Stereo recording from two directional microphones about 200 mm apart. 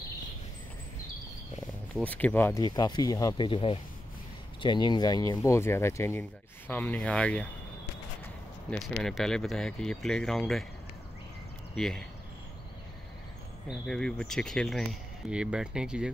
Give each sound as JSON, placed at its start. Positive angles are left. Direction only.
{"t": 2.0, "sound": "speech", "side_deg": 10}
{"t": 8.6, "sound": "speech", "side_deg": 0}
{"t": 11.7, "sound": "speech", "side_deg": 0}
{"t": 13.7, "sound": "speech", "side_deg": 0}